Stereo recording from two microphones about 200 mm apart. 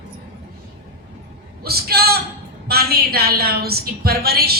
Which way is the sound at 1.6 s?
50° right (ahead or behind).